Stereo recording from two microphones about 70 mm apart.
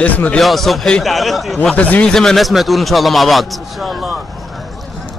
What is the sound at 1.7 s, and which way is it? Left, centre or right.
Speech, left.